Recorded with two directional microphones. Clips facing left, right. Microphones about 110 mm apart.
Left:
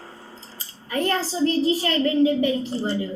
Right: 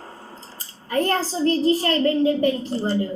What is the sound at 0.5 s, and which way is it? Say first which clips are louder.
A child's voice: right 4 dB; 40° right (ahead or behind).